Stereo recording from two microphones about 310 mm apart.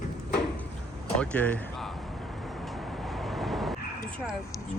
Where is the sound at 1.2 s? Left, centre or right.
Centre.